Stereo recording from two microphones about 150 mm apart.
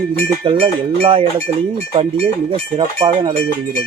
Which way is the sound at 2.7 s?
30° right (ahead or behind).